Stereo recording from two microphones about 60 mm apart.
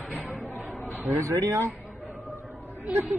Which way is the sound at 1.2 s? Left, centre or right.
Right.